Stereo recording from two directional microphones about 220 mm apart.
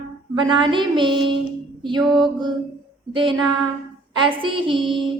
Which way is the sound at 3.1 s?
20° right (ahead or behind).